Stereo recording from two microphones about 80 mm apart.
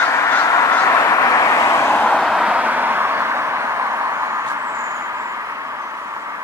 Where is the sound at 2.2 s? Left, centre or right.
Centre.